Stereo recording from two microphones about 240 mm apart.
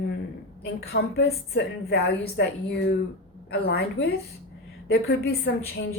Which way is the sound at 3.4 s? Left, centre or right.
Left.